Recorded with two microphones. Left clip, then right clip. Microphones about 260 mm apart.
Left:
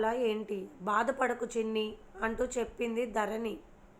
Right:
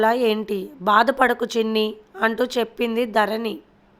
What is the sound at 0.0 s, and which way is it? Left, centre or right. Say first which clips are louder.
Speech: right 12 dB; right.